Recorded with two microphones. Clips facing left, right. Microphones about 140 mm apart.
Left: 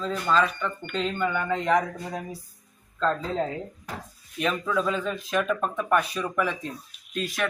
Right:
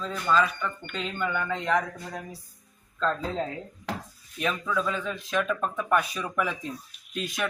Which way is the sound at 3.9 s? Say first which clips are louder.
Right 6 dB; 90° right.